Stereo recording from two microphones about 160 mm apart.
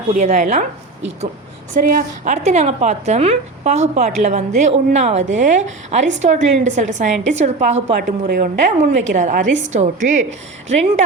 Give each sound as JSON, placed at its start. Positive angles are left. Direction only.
{"t": 0.1, "sound": "a woman's voice", "side_deg": -50}
{"t": 1.7, "sound": "a woman's voice", "side_deg": -65}
{"t": 2.3, "sound": "a woman's voice", "side_deg": -45}
{"t": 7.9, "sound": "speech", "side_deg": -75}
{"t": 8.8, "sound": "a woman's voice", "side_deg": -50}